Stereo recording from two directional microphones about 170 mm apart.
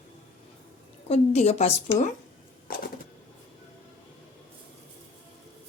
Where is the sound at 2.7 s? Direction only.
60° left (ahead or behind).